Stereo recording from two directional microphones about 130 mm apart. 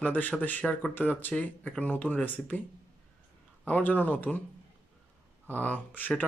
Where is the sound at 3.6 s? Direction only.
10° left (ahead or behind).